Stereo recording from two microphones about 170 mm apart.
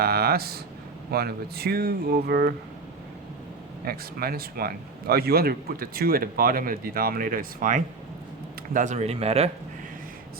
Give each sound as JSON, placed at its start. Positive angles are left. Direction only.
{"t": 0.0, "sound": "speech", "side_deg": -65}
{"t": 3.8, "sound": "speech", "side_deg": -65}